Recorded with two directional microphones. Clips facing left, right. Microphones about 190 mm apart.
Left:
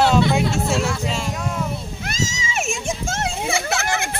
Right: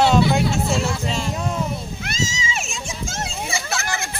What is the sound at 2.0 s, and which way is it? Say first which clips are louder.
Children playing: even; 50° left (ahead or behind).